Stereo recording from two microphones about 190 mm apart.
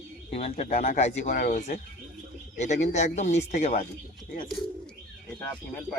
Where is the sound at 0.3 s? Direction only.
30° left (ahead or behind).